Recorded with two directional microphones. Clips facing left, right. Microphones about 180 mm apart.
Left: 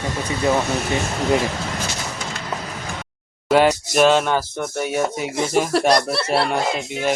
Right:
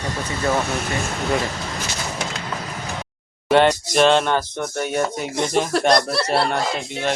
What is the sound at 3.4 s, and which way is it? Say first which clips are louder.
Speech: even; 5° left (ahead or behind).